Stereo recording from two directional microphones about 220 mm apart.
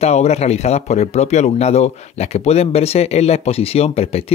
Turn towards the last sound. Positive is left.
turn(degrees=25)  # may be behind; listen again after turning